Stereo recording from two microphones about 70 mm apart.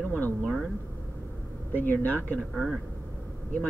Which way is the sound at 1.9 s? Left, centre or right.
Left.